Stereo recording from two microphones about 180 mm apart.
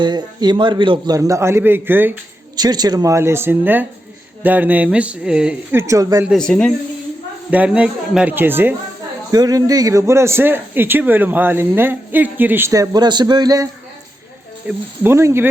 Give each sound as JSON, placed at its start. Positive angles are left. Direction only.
{"t": 0.0, "sound": "a man's voice", "side_deg": -25}
{"t": 2.6, "sound": "a man's voice", "side_deg": -20}
{"t": 5.8, "sound": "a man's voice", "side_deg": -20}
{"t": 6.2, "sound": "speech", "side_deg": 5}
{"t": 7.5, "sound": "a man's voice", "side_deg": -5}
{"t": 14.7, "sound": "a man's voice", "side_deg": -15}